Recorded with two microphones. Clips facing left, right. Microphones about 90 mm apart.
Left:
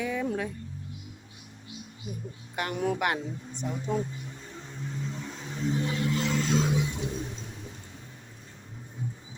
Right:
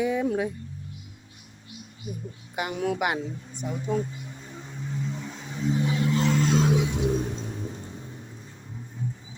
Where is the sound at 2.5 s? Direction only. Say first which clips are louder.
Right 1 dB; 10° right (ahead or behind).